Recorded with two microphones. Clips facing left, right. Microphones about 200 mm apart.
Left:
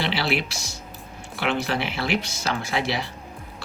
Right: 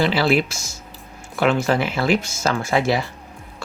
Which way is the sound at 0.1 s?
50° right (ahead or behind).